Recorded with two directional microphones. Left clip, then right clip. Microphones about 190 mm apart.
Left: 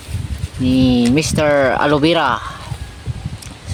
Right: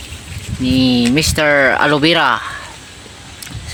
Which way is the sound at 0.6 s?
Centre (ahead or behind).